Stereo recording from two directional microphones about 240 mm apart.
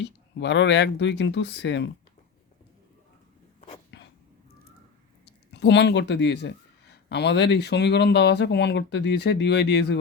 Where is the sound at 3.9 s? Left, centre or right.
Left.